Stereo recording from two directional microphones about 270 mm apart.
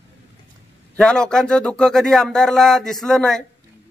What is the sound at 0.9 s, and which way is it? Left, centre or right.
Speech, centre.